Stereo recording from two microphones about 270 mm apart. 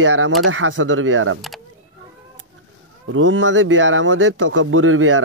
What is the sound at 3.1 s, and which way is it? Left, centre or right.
Speech, right.